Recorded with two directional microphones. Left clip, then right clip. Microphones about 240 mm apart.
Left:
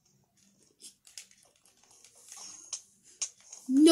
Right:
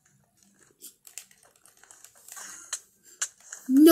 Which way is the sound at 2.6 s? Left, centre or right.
Centre.